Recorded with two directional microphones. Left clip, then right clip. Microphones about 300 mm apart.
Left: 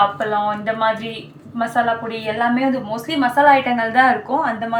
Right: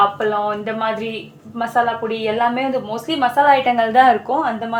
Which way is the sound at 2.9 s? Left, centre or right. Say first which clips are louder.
Right 2 dB; right.